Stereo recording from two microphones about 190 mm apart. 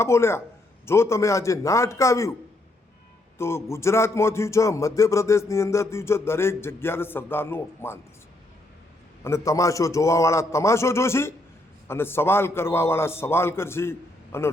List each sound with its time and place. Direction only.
0.0 s a man's voice: 15° left (ahead or behind)
3.3 s a man's voice: 15° left (ahead or behind)
9.2 s a man's voice: 15° left (ahead or behind)